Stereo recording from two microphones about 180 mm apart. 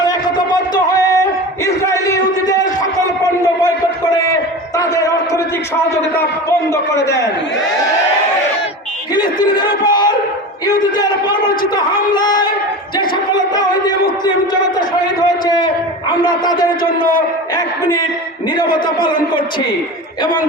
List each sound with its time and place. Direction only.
0.0 s a sound: 20° left (ahead or behind)
4.8 s a sound: 20° left (ahead or behind)
6.9 s a man's voice: 15° left (ahead or behind)
9.2 s speech: 25° left (ahead or behind)
13.0 s battle cry: 25° left (ahead or behind)
16.2 s speech: 25° left (ahead or behind)
17.0 s a man's voice: 50° left (ahead or behind)